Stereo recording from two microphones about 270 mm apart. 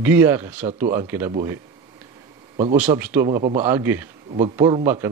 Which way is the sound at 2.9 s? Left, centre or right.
Centre.